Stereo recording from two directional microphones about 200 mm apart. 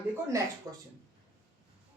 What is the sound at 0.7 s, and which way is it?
Speech, 15° right (ahead or behind).